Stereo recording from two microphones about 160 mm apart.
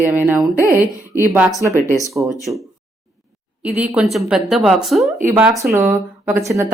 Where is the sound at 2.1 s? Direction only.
20° right (ahead or behind).